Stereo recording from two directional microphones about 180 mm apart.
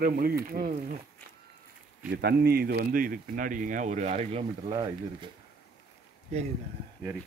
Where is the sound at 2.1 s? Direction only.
65° right (ahead or behind); by 4.4 s 40° right (ahead or behind).